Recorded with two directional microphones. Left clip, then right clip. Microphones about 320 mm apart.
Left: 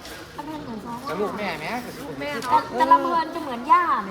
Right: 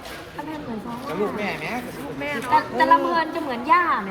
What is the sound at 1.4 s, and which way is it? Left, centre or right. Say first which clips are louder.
Speech: right 1 dB; left.